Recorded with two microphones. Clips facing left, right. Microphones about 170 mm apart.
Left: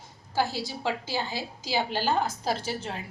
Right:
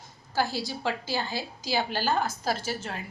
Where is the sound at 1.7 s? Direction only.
20° left (ahead or behind).